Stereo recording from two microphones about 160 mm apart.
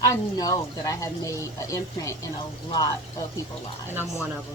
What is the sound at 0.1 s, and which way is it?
Speech, 20° left (ahead or behind).